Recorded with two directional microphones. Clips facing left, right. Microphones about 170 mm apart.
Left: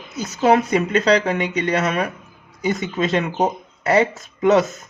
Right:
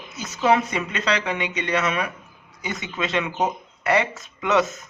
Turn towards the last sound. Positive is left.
turn(degrees=35)  # may be behind; listen again after turning